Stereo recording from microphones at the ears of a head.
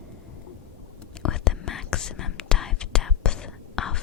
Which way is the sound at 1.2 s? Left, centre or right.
Left.